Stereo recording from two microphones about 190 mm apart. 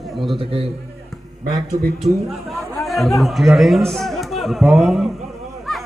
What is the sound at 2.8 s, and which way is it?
A man's voice, centre (ahead or behind).